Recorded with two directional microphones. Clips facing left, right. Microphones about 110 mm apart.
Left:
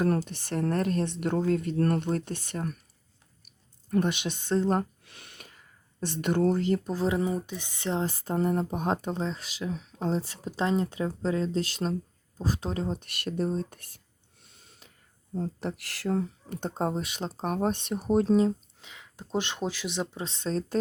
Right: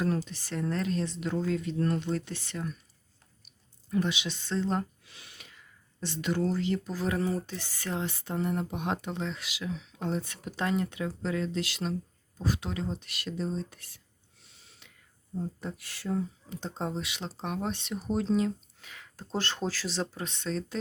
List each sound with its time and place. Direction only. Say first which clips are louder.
0.3 s speech: left 4 dB; 55° left (ahead or behind)
3.8 s speech: left 3 dB; 50° left (ahead or behind)
6.9 s speech: left 3 dB; 25° left (ahead or behind)
8.0 s speech: left 4 dB; 40° left (ahead or behind)
14.4 s a sound: left 2 dB; 50° left (ahead or behind)
15.4 s speech: left 4 dB; 75° left (ahead or behind); by 18.3 s 50° left (ahead or behind)
18.8 s speech: left 1 dB; 20° left (ahead or behind)
20.2 s speech: left 3 dB; 40° left (ahead or behind)